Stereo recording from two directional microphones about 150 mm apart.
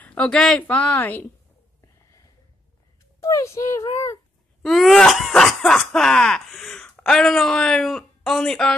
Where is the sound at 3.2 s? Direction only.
20° left (ahead or behind).